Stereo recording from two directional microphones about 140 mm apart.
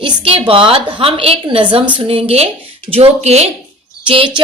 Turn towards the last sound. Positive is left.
turn(degrees=-40)  # may be behind; listen again after turning